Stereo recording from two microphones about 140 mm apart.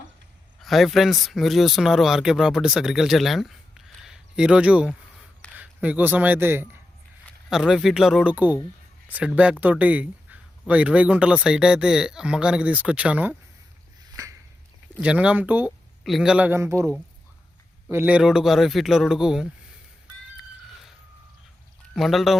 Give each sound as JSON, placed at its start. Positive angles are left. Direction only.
{"t": 0.6, "sound": "a man's voice", "side_deg": 0}
{"t": 7.5, "sound": "speech", "side_deg": -5}
{"t": 15.0, "sound": "speech", "side_deg": -10}
{"t": 16.5, "sound": "speech", "side_deg": -20}
{"t": 20.3, "sound": "a sound", "side_deg": 0}
{"t": 21.9, "sound": "speech", "side_deg": 0}